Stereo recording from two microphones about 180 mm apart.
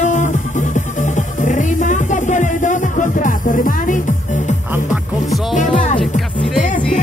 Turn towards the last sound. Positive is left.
turn(degrees=45)  # may be behind; listen again after turning